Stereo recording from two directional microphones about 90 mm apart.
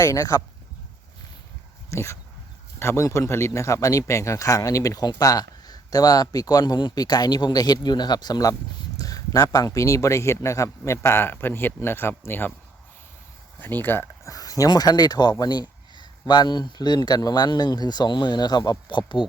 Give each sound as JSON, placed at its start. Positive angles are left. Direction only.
{"t": 0.0, "sound": "speech", "side_deg": 35}
{"t": 1.9, "sound": "speech", "side_deg": 30}
{"t": 13.6, "sound": "speech", "side_deg": 20}
{"t": 14.3, "sound": "speech", "side_deg": 40}